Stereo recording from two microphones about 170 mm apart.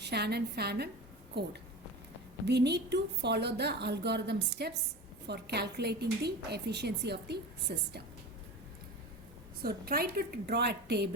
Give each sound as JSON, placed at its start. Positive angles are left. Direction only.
{"t": 0.0, "sound": "a woman's voice", "side_deg": -75}
{"t": 2.5, "sound": "a woman's voice", "side_deg": -80}
{"t": 9.6, "sound": "a woman's voice", "side_deg": -65}